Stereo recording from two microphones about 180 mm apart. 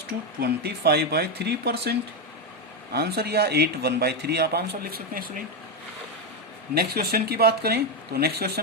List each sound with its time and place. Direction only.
0.3 s speech: 60° right (ahead or behind)
6.7 s speech: 60° right (ahead or behind)